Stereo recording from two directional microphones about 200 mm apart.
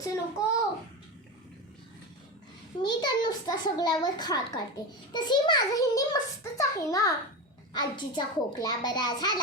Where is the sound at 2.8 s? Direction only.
20° left (ahead or behind).